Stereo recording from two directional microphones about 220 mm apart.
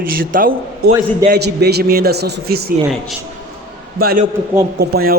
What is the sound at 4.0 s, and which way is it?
A man's voice, 45° right (ahead or behind).